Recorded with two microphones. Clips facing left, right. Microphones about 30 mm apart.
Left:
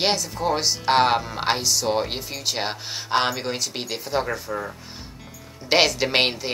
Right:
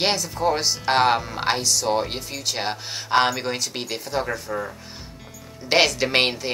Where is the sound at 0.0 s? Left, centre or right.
Centre.